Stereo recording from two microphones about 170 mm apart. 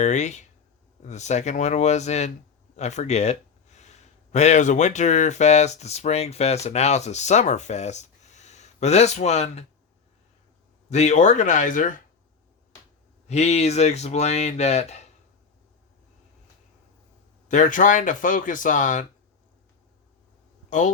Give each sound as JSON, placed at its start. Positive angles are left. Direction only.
{"t": 0.0, "sound": "speech", "side_deg": 45}
{"t": 10.8, "sound": "speech", "side_deg": 40}
{"t": 13.2, "sound": "speech", "side_deg": 40}
{"t": 17.5, "sound": "speech", "side_deg": 50}
{"t": 20.7, "sound": "speech", "side_deg": 45}